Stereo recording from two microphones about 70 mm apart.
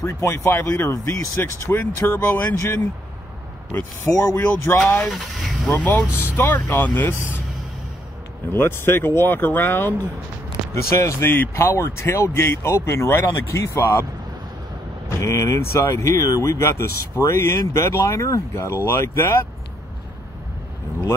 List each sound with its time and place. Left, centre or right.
0.0 s speech: left
4.1 s speech: centre
4.4 s speech: left
8.5 s speech: left
10.7 s speech: left
15.0 s speech: left